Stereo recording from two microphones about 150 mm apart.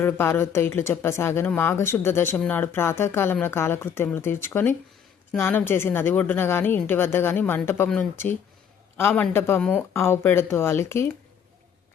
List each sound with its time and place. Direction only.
0.0 s speech: 15° left (ahead or behind)